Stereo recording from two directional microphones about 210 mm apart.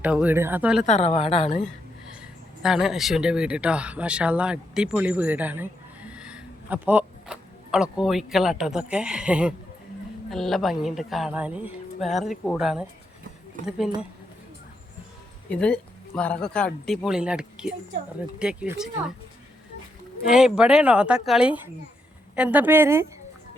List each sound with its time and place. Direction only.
0.0 s speech: 5° right (ahead or behind)
0.9 s a woman's voice: 30° left (ahead or behind)
2.2 s a woman's voice: 5° right (ahead or behind)
15.4 s a woman's voice: 5° left (ahead or behind)
20.2 s a woman's voice: 5° right (ahead or behind)